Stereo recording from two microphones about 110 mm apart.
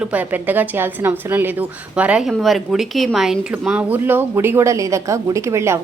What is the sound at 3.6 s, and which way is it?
Speech, 15° right (ahead or behind).